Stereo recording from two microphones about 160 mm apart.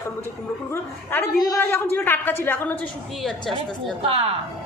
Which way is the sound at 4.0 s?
35° right (ahead or behind).